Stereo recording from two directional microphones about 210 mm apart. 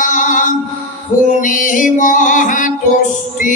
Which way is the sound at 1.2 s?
35° left (ahead or behind).